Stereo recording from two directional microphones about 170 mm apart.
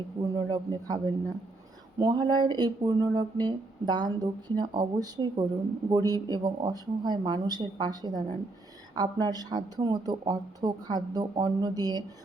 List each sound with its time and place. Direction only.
0.3 s speech: 25° right (ahead or behind)
2.0 s speech: 25° right (ahead or behind)